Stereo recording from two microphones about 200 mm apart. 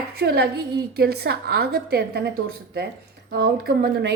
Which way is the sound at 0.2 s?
55° right (ahead or behind).